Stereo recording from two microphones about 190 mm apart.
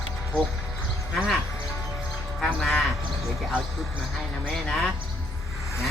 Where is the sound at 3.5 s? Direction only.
Centre (ahead or behind).